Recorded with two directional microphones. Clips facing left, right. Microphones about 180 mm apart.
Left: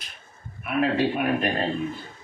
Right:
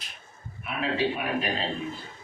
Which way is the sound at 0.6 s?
55° left (ahead or behind).